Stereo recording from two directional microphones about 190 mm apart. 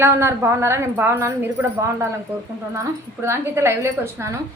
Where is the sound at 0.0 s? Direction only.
15° right (ahead or behind).